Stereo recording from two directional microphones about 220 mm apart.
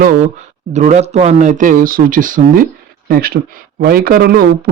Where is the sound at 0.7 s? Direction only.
30° right (ahead or behind).